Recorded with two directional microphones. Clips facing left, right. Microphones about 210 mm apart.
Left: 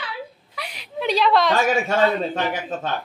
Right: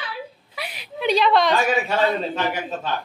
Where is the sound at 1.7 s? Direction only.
50° left (ahead or behind).